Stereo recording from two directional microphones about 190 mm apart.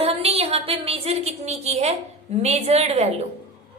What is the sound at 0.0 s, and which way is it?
A woman's voice, 30° right (ahead or behind).